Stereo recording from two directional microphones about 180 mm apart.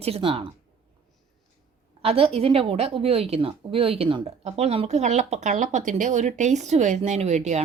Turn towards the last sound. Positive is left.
turn(degrees=-40)  # may be behind; listen again after turning